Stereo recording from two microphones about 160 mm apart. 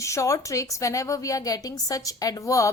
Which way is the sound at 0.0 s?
20° left (ahead or behind).